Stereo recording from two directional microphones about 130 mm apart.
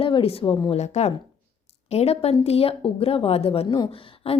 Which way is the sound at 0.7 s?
55° left (ahead or behind).